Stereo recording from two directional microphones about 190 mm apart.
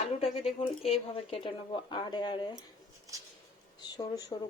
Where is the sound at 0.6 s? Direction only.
30° left (ahead or behind).